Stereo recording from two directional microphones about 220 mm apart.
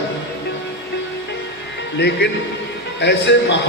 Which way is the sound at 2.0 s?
50° left (ahead or behind).